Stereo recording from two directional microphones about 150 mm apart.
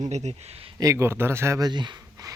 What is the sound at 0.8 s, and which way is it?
Speech, 20° right (ahead or behind).